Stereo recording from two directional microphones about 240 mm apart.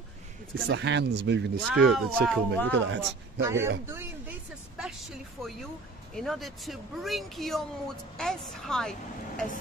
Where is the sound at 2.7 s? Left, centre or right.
Right.